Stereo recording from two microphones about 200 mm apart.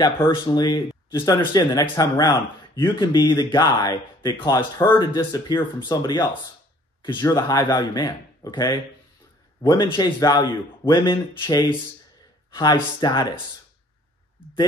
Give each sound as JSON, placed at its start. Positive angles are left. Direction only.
{"t": 0.0, "sound": "speech", "side_deg": 20}